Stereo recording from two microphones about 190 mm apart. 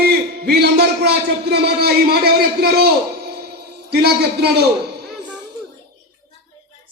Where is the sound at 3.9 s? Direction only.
60° right (ahead or behind).